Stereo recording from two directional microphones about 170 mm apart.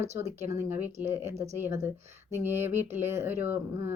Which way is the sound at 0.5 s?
15° right (ahead or behind).